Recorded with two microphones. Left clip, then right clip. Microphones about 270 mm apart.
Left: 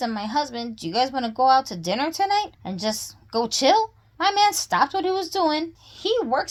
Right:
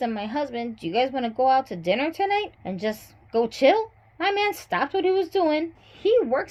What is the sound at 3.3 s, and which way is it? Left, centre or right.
Speech, left.